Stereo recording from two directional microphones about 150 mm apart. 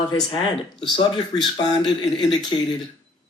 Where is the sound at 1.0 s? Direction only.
30° left (ahead or behind).